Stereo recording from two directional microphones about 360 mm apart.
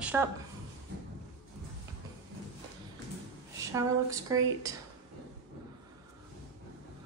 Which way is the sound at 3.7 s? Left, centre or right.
Centre.